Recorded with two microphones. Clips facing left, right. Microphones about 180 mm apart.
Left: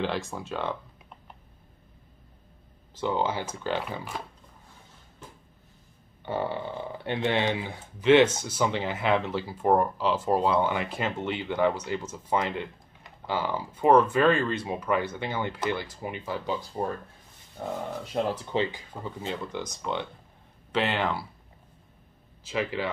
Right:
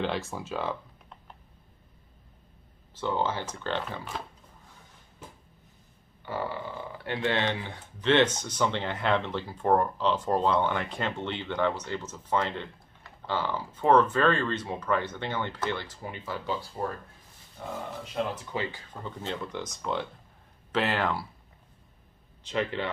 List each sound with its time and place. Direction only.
0.0 s speech: centre (ahead or behind)
3.0 s speech: 15° left (ahead or behind)
6.2 s speech: 25° left (ahead or behind)
17.6 s speech: 40° left (ahead or behind)
18.1 s speech: 30° left (ahead or behind); by 19.1 s 15° left (ahead or behind)
19.2 s speech: centre (ahead or behind)
22.4 s speech: 5° left (ahead or behind)